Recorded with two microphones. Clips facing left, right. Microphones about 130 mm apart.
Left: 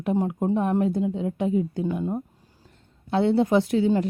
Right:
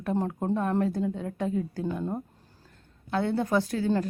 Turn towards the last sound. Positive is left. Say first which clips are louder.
# left 5 dB
turn(degrees=20)  # may be behind; listen again after turning